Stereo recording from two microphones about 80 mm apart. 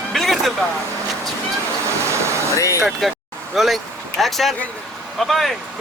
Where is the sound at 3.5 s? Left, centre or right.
Centre.